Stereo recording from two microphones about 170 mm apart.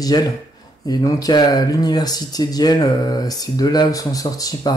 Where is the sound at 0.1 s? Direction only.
25° left (ahead or behind).